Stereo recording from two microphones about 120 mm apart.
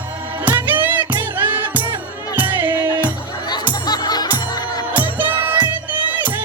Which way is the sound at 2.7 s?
35° left (ahead or behind).